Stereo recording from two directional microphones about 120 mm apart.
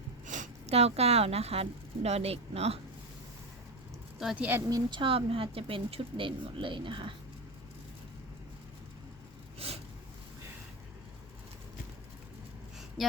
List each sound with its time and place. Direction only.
0.3 s a woman's voice: 75° right (ahead or behind); by 2.8 s 60° right (ahead or behind)
4.2 s speech: 5° right (ahead or behind)
4.7 s speech: 40° right (ahead or behind)
9.6 s a sound: 55° right (ahead or behind)